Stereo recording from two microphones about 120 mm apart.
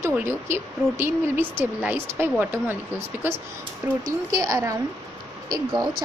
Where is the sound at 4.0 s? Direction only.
30° right (ahead or behind).